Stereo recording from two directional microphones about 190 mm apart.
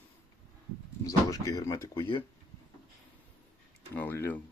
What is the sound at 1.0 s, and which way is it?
Speech, 20° left (ahead or behind).